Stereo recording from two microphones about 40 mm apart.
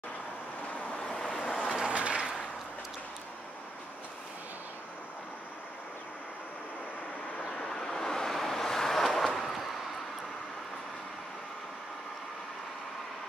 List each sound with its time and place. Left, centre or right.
1.5 s vehicle: centre
1.9 s a sound: right
7.4 s vehicle: centre
9.4 s vehicle: centre